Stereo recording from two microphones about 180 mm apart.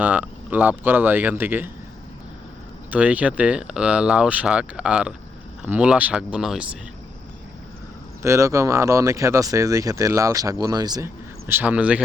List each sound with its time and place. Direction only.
0.0 s speech: 10° right (ahead or behind)
2.9 s speech: 5° right (ahead or behind)
8.2 s speech: 15° right (ahead or behind)